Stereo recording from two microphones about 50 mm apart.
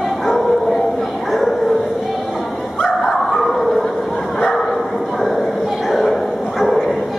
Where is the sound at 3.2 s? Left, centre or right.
Centre.